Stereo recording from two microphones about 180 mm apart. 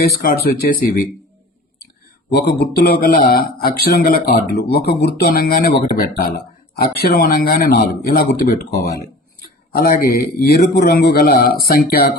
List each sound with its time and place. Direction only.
0.0 s a man's voice: 55° left (ahead or behind)
2.3 s a man's voice: 65° left (ahead or behind)